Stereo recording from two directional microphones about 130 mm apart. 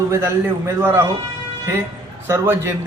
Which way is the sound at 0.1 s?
20° right (ahead or behind).